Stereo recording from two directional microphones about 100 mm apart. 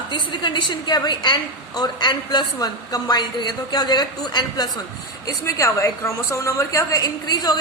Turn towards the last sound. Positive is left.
turn(degrees=40)  # may be behind; listen again after turning